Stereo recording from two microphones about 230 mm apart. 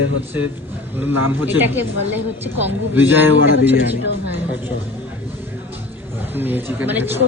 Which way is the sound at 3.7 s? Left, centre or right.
Left.